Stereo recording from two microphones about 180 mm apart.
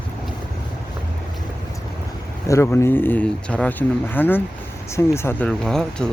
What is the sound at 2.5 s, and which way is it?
Speech, 15° left (ahead or behind).